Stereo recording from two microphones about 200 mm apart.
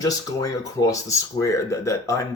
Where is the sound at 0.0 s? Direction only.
15° left (ahead or behind).